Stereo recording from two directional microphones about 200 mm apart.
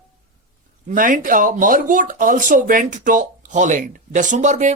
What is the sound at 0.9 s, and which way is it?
Speech, 40° right (ahead or behind).